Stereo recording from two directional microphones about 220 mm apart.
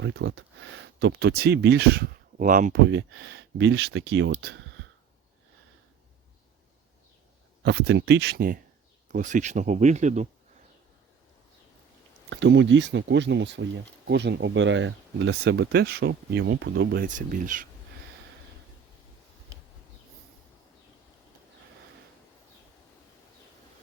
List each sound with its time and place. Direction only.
0.0 s speech: 60° right (ahead or behind); by 2.7 s 35° right (ahead or behind)
2.8 s speech: 55° right (ahead or behind)
7.6 s speech: 50° right (ahead or behind)
9.1 s speech: 35° right (ahead or behind)
12.3 s speech: 55° right (ahead or behind); by 17.7 s 35° right (ahead or behind)